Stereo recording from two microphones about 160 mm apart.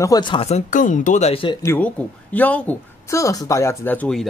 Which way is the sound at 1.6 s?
10° left (ahead or behind).